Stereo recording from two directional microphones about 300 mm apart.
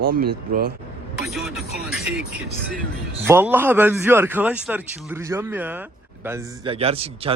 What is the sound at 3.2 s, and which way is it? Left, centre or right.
A man's voice, centre.